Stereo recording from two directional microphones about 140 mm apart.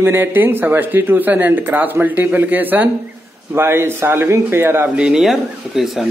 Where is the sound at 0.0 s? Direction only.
15° right (ahead or behind).